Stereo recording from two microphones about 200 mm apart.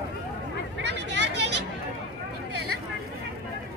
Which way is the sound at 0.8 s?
60° right (ahead or behind).